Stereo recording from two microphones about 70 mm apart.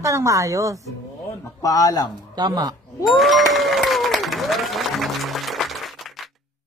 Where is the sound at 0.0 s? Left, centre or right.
Right.